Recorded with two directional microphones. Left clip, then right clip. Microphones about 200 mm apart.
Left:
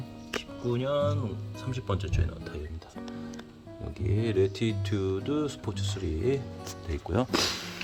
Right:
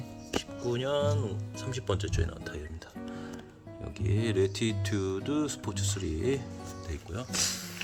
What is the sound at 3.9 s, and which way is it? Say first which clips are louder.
Speech: left 2 dB; 10° right (ahead or behind).